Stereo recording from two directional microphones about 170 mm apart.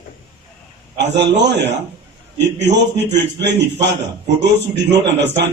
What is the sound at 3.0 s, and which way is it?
A man's voice, 90° right.